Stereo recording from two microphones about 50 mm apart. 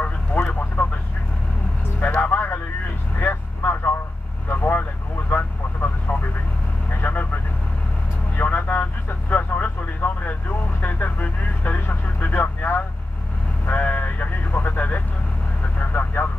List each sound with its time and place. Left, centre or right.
0.0 s vehicle: left
2.0 s music: left
3.2 s vehicle: left
8.4 s vehicle: left
13.7 s vehicle: left